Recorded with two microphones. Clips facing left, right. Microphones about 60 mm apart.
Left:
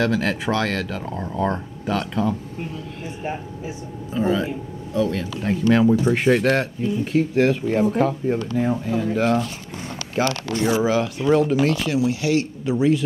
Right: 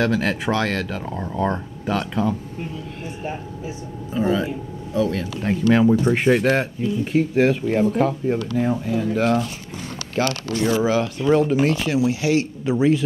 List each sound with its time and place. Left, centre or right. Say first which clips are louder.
0.0 s speech: right 1 dB; centre
3.2 s speech: left 1 dB; left
4.1 s speech: even; centre
5.7 s speech: even; centre
10.2 s speech: left 1 dB; left
10.8 s speech: even; centre
11.7 s speech: right 1 dB; right